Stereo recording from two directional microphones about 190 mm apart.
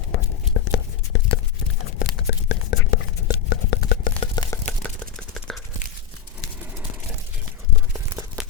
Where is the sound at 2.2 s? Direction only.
65° left (ahead or behind).